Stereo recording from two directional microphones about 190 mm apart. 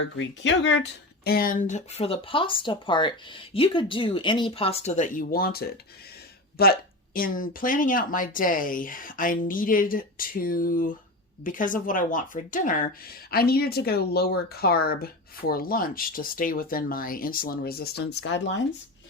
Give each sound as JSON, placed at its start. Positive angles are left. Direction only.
{"t": 0.2, "sound": "speech", "side_deg": 75}